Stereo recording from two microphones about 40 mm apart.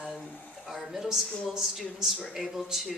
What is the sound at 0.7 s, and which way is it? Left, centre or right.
Speech, centre.